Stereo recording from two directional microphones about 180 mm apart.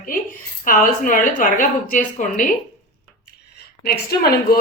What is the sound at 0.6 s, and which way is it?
A woman's voice, 50° left (ahead or behind).